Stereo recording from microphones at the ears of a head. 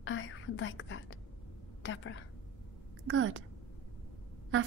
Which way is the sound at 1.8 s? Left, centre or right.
Left.